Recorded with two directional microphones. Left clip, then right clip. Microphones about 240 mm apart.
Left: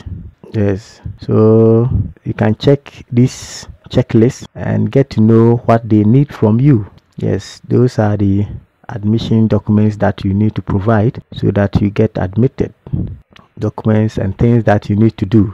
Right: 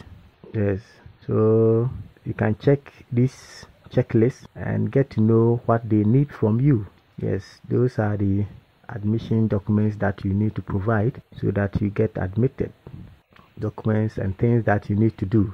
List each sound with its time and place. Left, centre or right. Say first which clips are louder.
0.5 s speech: left 8 dB; left